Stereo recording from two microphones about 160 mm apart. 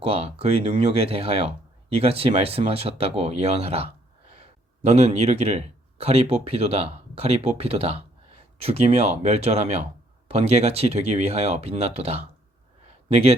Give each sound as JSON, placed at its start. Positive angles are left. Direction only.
{"t": 0.0, "sound": "speech", "side_deg": -40}